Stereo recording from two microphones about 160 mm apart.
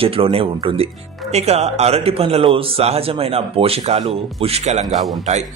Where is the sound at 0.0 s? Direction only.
35° right (ahead or behind).